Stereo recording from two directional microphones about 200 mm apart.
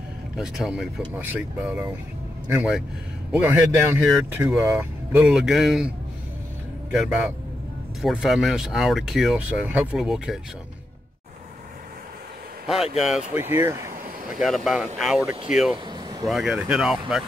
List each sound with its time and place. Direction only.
0.4 s speech: centre (ahead or behind)
7.0 s speech: 5° right (ahead or behind)
12.6 s speech: centre (ahead or behind)
14.4 s speech: centre (ahead or behind)
15.9 s a sound: 20° right (ahead or behind)
16.3 s speech: centre (ahead or behind)